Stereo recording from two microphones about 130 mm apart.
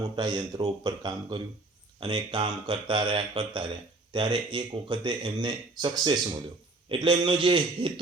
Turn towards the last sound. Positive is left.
turn(degrees=-40)  # may be behind; listen again after turning